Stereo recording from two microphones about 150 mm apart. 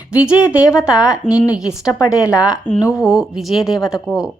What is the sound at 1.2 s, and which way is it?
Speech, 20° left (ahead or behind).